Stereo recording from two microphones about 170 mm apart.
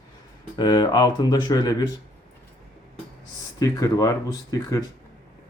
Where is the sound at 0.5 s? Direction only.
25° left (ahead or behind).